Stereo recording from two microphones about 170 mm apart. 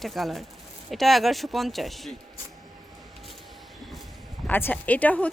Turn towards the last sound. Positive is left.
turn(degrees=10)  # may be behind; listen again after turning